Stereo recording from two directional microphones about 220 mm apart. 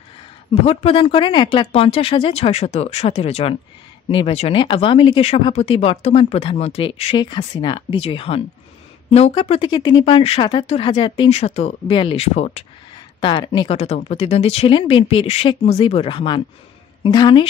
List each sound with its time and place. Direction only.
0.7 s speech: 25° left (ahead or behind)